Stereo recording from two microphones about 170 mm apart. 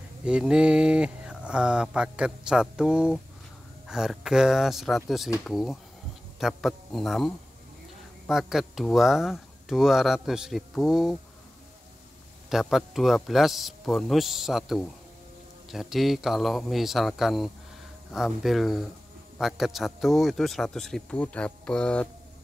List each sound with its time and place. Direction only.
0.2 s speech: 5° right (ahead or behind)
12.4 s speech: centre (ahead or behind)